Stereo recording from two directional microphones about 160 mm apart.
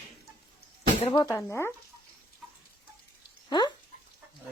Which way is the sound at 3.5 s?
30° left (ahead or behind).